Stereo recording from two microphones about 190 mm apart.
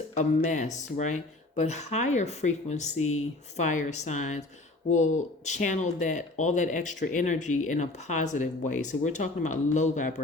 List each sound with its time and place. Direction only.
0.1 s speech: 40° left (ahead or behind)